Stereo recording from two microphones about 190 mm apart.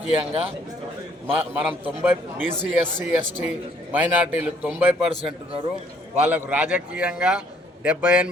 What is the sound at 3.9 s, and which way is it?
Speech, 10° right (ahead or behind).